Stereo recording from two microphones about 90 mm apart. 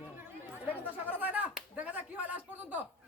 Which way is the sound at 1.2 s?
20° right (ahead or behind).